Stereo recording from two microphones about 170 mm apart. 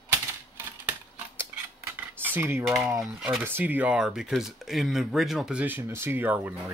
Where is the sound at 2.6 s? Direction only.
5° right (ahead or behind).